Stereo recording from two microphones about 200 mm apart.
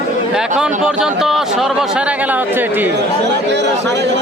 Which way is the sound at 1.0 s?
Centre (ahead or behind).